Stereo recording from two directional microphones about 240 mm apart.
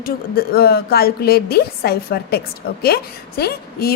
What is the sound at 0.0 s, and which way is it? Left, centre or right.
A woman's voice, left.